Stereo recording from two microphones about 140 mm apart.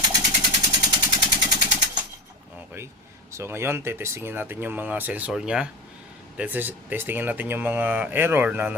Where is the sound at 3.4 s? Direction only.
15° right (ahead or behind).